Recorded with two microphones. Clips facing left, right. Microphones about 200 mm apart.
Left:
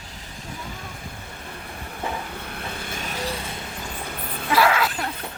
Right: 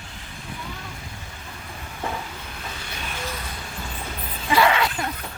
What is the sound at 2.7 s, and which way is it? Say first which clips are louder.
Vehicle: left 3 dB; 50° left (ahead or behind).